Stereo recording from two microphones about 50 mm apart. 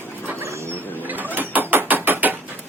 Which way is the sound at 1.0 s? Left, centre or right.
Right.